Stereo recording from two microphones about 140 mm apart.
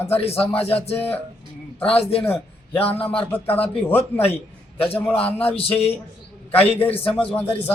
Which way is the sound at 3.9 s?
15° left (ahead or behind).